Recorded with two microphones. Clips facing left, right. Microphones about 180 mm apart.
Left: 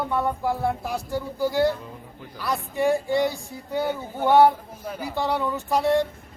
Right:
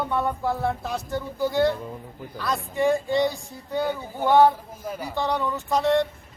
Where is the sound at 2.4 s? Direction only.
15° left (ahead or behind).